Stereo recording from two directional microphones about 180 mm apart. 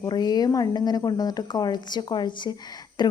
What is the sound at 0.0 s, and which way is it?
A woman's voice, 20° left (ahead or behind).